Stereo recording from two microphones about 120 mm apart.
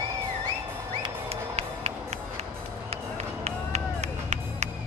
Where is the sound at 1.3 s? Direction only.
60° right (ahead or behind).